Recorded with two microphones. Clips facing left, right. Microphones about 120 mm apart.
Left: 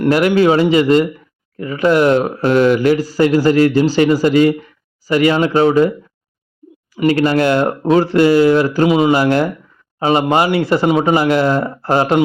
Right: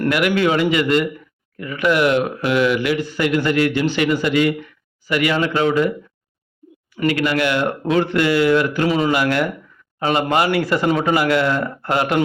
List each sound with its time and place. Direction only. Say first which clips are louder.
0.1 s a man's voice: left 7 dB; 30° left (ahead or behind)
7.1 s speech: left 6 dB; 35° left (ahead or behind)
8.9 s speech: left 6 dB; 15° left (ahead or behind)
9.1 s a man's voice: left 5 dB; 30° left (ahead or behind)